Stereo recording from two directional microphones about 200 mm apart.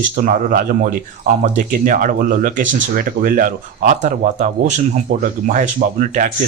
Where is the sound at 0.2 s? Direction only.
45° right (ahead or behind).